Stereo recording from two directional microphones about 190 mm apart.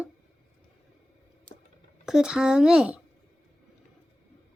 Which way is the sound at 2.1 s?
5° right (ahead or behind).